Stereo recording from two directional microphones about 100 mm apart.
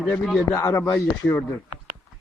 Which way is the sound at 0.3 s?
5° left (ahead or behind).